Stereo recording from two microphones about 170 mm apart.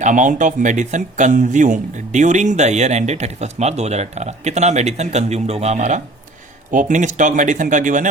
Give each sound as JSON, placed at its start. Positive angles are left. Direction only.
{"t": 0.0, "sound": "speech", "side_deg": -50}